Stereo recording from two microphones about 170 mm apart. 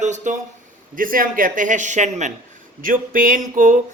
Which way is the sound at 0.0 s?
45° right (ahead or behind).